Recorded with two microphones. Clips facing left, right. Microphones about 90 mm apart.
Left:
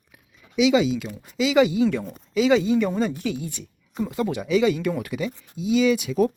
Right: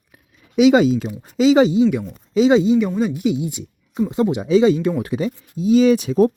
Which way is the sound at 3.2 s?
20° right (ahead or behind).